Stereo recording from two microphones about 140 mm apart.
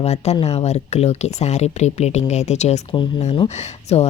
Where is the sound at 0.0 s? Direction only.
50° left (ahead or behind).